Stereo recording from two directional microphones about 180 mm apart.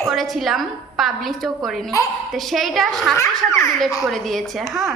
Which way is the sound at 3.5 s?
15° left (ahead or behind).